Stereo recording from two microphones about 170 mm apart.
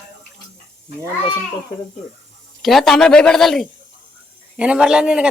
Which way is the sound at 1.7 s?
25° left (ahead or behind).